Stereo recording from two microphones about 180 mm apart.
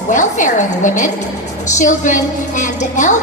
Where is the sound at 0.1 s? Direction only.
45° left (ahead or behind).